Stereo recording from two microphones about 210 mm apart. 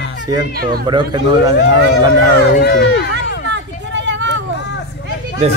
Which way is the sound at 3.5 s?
60° right (ahead or behind).